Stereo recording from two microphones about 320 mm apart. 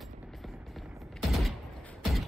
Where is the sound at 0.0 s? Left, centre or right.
Centre.